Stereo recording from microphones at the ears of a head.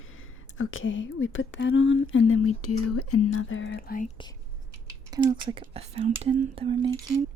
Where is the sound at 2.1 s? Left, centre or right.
Left.